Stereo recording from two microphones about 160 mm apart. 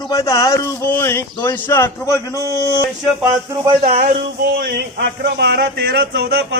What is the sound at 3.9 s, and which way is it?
Speech, 50° right (ahead or behind).